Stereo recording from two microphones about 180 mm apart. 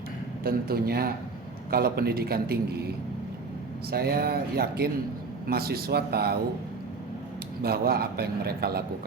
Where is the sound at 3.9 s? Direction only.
60° right (ahead or behind).